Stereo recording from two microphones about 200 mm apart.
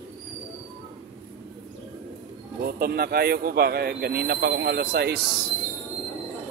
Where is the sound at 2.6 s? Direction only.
50° right (ahead or behind).